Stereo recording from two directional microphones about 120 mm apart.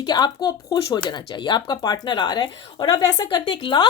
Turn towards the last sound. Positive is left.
turn(degrees=45)  # may be behind; listen again after turning